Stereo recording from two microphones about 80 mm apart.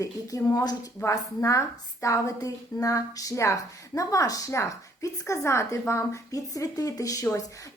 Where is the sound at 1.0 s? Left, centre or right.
Left.